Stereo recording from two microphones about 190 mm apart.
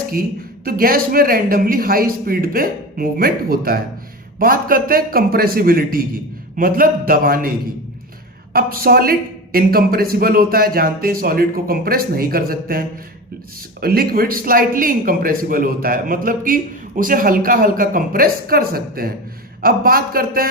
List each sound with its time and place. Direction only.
0.1 s speech: 50° right (ahead or behind)
8.5 s speech: 50° right (ahead or behind)
13.8 s speech: 50° right (ahead or behind)